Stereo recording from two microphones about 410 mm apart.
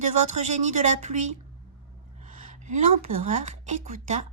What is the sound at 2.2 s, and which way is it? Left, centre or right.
Gasp, centre.